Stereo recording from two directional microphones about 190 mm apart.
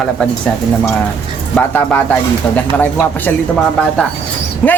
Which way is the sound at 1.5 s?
10° left (ahead or behind).